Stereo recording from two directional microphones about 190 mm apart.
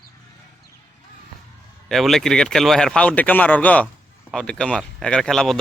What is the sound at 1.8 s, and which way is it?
Speech, centre (ahead or behind).